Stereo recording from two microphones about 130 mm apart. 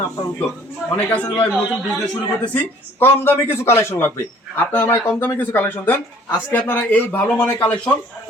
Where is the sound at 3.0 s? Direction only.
15° left (ahead or behind).